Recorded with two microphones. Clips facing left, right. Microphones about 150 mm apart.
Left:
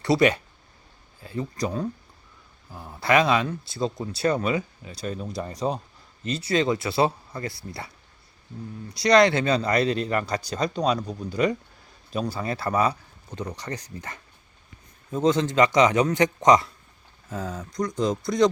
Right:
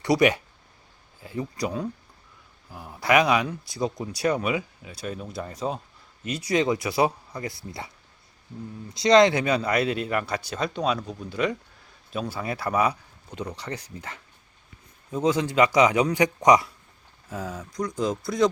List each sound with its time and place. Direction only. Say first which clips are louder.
0.0 s speech: even; 15° right (ahead or behind)
8.9 s speech: right 1 dB; 20° right (ahead or behind); by 18.4 s 5° right (ahead or behind)